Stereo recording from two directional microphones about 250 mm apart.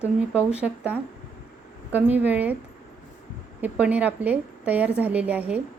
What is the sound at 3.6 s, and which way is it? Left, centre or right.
A woman's voice, centre.